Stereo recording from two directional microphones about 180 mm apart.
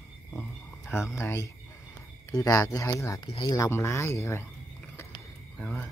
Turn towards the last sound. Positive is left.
turn(degrees=10)  # may be behind; listen again after turning